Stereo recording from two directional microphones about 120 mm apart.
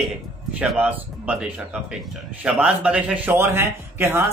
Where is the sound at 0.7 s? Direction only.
10° right (ahead or behind).